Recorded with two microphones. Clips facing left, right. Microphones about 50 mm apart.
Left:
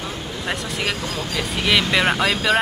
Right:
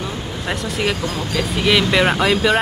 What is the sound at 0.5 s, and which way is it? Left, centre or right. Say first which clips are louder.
Speech: right 4 dB; centre.